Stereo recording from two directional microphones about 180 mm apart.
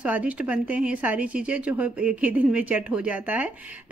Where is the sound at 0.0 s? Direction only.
5° right (ahead or behind).